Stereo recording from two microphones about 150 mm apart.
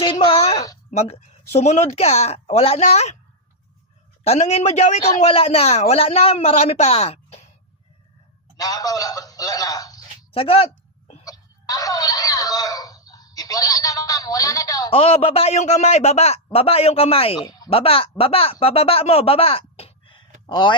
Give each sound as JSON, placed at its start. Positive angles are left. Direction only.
{"t": 0.0, "sound": "a sound", "side_deg": 35}
{"t": 0.9, "sound": "a man's voice", "side_deg": 45}
{"t": 4.2, "sound": "a man's voice", "side_deg": 45}
{"t": 8.5, "sound": "a man's voice", "side_deg": 25}
{"t": 10.3, "sound": "speech", "side_deg": 40}
{"t": 11.2, "sound": "a sound", "side_deg": 25}
{"t": 14.8, "sound": "a man's voice", "side_deg": 40}